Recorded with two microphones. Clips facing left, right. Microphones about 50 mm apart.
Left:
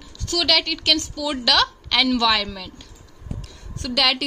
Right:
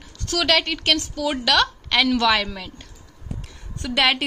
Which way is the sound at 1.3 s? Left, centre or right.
Centre.